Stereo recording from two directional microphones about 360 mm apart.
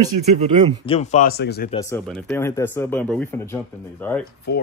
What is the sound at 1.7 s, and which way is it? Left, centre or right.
Speech, centre.